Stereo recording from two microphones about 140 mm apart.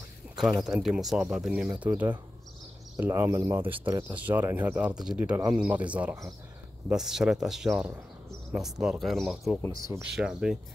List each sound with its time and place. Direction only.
0.4 s speech: centre (ahead or behind)